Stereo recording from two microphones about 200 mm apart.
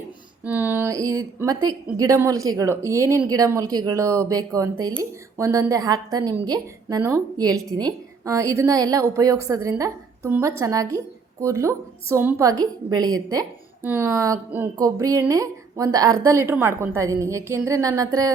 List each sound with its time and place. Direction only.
0.4 s speech: 10° right (ahead or behind)